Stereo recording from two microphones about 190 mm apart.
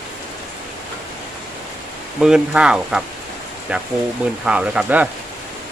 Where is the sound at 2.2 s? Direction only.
5° right (ahead or behind).